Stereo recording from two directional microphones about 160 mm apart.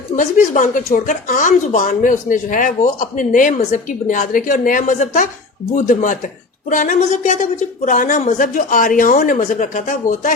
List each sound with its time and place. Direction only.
0.2 s speech: 55° left (ahead or behind)